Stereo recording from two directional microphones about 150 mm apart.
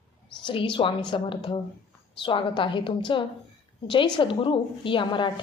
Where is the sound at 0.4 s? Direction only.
35° left (ahead or behind).